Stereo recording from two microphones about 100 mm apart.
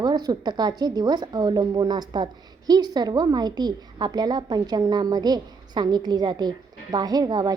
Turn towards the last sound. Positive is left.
turn(degrees=-40)  # may be behind; listen again after turning